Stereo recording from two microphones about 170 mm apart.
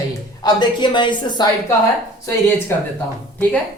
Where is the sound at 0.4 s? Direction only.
25° left (ahead or behind).